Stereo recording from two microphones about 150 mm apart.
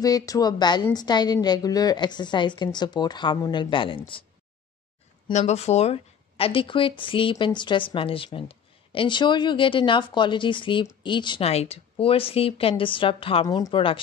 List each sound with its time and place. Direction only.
0.0 s a woman's voice: 25° left (ahead or behind)
5.3 s speech: 50° left (ahead or behind); by 13.9 s 30° left (ahead or behind)